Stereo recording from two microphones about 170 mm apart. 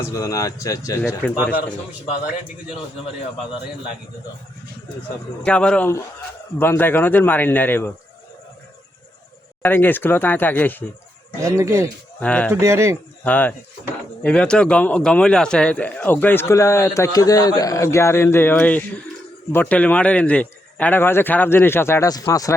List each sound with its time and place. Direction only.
0.1 s speech: 20° left (ahead or behind)
5.5 s speech: 5° left (ahead or behind)
9.6 s speech: 10° left (ahead or behind)
11.3 s speech: 20° right (ahead or behind)
12.2 s speech: 5° left (ahead or behind)
12.5 s speech: 15° right (ahead or behind)
13.2 s speech: 10° left (ahead or behind)